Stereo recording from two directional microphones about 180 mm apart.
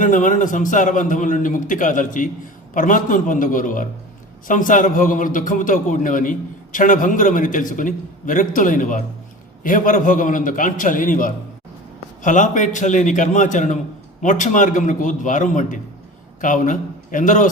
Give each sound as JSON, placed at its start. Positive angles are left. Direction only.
{"t": 0.0, "sound": "a man's voice", "side_deg": 45}